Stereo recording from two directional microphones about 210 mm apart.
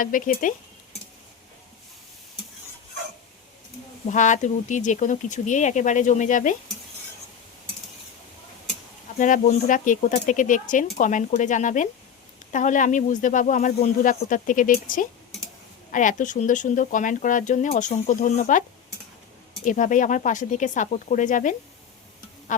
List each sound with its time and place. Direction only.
0.0 s speech: 40° left (ahead or behind)
4.0 s speech: 35° left (ahead or behind)
9.1 s speech: 35° left (ahead or behind)
19.6 s speech: 40° left (ahead or behind)